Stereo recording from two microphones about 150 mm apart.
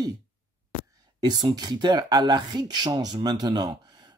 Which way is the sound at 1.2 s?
25° right (ahead or behind).